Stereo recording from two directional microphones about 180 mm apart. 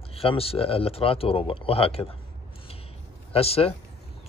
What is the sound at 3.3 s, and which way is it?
Speech, 35° left (ahead or behind).